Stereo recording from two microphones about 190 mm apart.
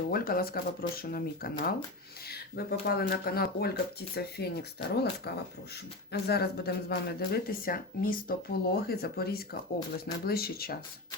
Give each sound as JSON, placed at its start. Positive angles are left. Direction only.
{"t": 0.1, "sound": "speech", "side_deg": 50}